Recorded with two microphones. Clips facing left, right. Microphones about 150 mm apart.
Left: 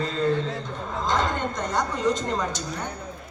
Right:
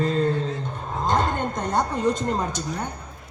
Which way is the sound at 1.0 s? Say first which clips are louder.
Right 2 dB; 50° right (ahead or behind).